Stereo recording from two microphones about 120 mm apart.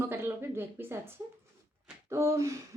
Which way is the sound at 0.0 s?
20° right (ahead or behind).